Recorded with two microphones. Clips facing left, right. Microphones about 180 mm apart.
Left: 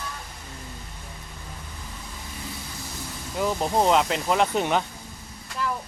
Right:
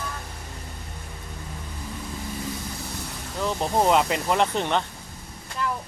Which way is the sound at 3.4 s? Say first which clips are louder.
Even; centre (ahead or behind).